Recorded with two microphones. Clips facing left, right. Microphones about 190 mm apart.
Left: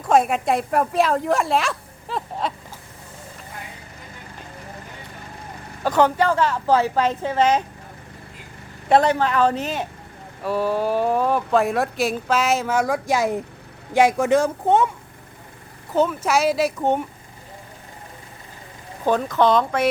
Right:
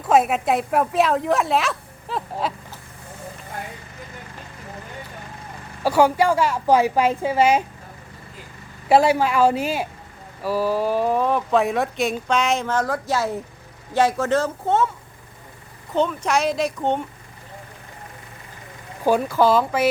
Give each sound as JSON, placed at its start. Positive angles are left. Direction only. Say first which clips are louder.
{"t": 0.0, "sound": "speech", "louder": "even", "side_deg": -5}
{"t": 5.8, "sound": "a woman's voice", "louder": "right 1 dB", "side_deg": -10}
{"t": 8.9, "sound": "a woman's voice", "louder": "right 1 dB", "side_deg": -10}
{"t": 16.0, "sound": "speech", "louder": "left 1 dB", "side_deg": 5}
{"t": 19.0, "sound": "a woman's voice", "louder": "right 1 dB", "side_deg": -10}